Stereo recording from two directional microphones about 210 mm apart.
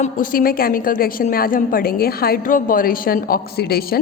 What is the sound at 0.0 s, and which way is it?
A woman's voice, 40° left (ahead or behind).